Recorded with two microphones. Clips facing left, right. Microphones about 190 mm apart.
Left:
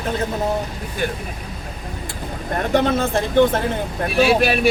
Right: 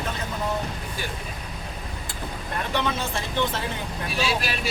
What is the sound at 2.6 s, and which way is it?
Speech, 50° left (ahead or behind).